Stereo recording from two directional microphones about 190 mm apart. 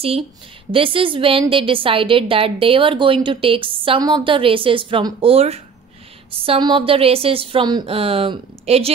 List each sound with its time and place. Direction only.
0.7 s a woman's voice: 30° right (ahead or behind)